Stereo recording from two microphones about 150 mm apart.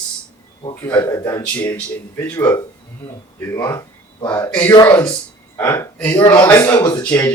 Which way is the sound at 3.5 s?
20° left (ahead or behind).